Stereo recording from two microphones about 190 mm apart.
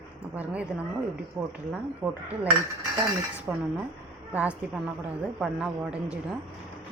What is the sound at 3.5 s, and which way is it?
A woman's voice, 5° right (ahead or behind).